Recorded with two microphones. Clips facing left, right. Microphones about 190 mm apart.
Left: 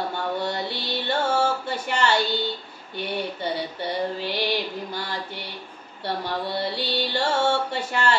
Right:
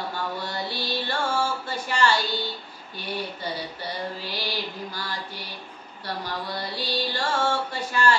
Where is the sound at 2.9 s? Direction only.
25° left (ahead or behind).